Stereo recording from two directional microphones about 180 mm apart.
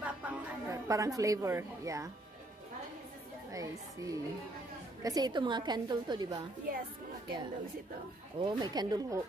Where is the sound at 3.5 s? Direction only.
20° right (ahead or behind).